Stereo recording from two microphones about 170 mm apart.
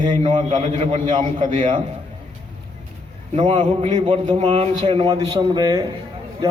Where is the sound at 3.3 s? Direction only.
30° right (ahead or behind).